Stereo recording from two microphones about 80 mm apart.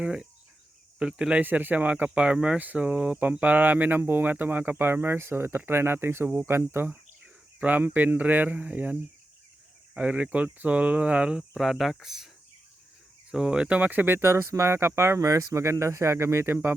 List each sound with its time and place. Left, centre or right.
0.0 s speech: centre
1.4 s speech: right; by 12.3 s centre
13.3 s speech: centre; by 16.6 s right